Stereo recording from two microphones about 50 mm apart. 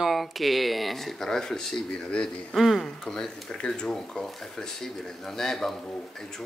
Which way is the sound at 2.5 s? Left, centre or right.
Centre.